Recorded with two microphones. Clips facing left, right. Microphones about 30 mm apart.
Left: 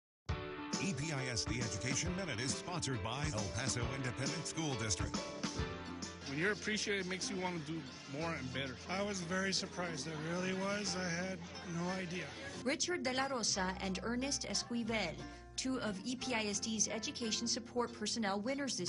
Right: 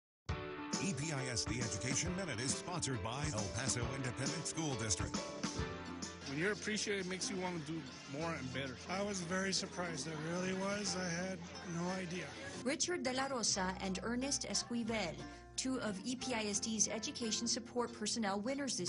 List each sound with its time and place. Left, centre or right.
0.3 s speech: centre